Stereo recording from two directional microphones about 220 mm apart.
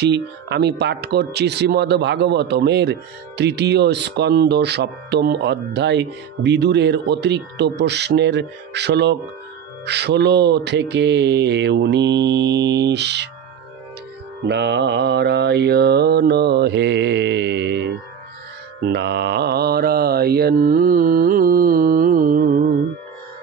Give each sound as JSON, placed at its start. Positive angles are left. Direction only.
{"t": 0.0, "sound": "speech", "side_deg": -50}
{"t": 14.4, "sound": "speech", "side_deg": -50}
{"t": 18.9, "sound": "mantra", "side_deg": -50}